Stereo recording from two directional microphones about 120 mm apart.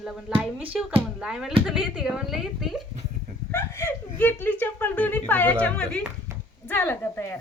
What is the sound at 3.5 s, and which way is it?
Speech, 20° left (ahead or behind).